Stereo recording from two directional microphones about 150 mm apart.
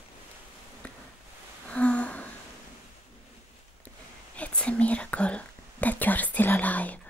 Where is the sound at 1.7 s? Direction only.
10° left (ahead or behind).